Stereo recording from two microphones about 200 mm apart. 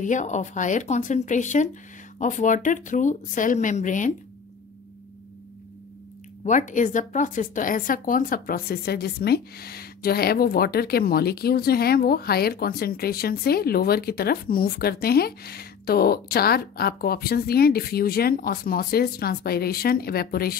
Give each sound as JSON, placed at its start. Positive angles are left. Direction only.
{"t": 0.0, "sound": "speech", "side_deg": 40}
{"t": 6.4, "sound": "speech", "side_deg": 40}